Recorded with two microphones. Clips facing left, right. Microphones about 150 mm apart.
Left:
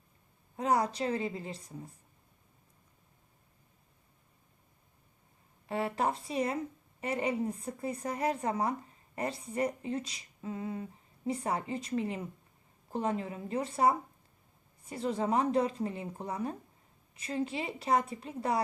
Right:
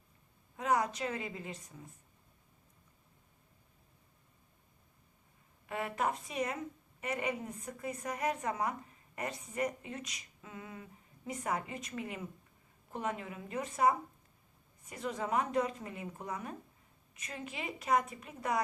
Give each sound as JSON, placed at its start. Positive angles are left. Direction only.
{"t": 0.5, "sound": "a woman's voice", "side_deg": 35}
{"t": 5.6, "sound": "a woman's voice", "side_deg": 30}